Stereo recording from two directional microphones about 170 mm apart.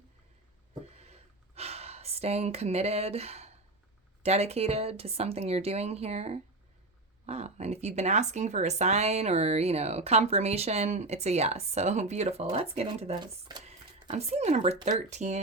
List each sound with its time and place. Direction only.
0.9 s gasp: 40° right (ahead or behind)
4.2 s speech: 40° right (ahead or behind)